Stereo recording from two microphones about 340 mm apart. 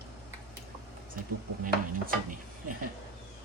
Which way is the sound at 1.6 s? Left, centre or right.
Right.